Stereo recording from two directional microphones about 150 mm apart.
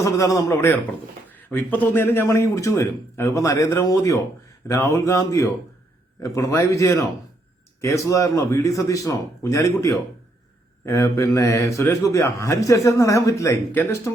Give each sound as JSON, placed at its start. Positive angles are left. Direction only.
{"t": 0.0, "sound": "a man's voice", "side_deg": 20}